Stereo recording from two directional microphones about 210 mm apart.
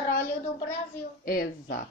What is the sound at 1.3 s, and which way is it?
Speech, 45° left (ahead or behind).